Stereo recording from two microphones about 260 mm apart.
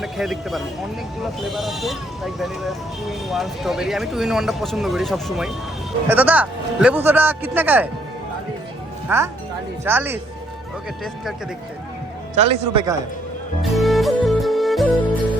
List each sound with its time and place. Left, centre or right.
0.0 s speech: centre
9.0 s speech: centre
12.3 s a man's voice: right
13.6 s music: centre